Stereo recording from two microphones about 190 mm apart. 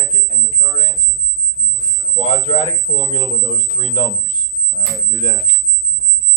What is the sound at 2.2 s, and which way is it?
Speech, 30° left (ahead or behind).